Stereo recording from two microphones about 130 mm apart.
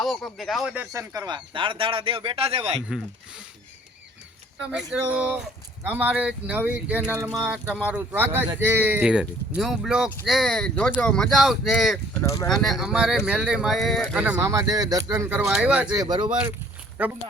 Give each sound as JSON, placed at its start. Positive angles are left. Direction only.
{"t": 0.0, "sound": "speech", "side_deg": 0}
{"t": 0.9, "sound": "speech", "side_deg": -25}
{"t": 1.5, "sound": "speech", "side_deg": -40}
{"t": 4.7, "sound": "speech", "side_deg": -5}
{"t": 12.2, "sound": "speech", "side_deg": 25}
{"t": 12.5, "sound": "speech", "side_deg": 0}
{"t": 14.4, "sound": "speech", "side_deg": -30}
{"t": 15.1, "sound": "speech", "side_deg": -15}
{"t": 16.0, "sound": "speech", "side_deg": -35}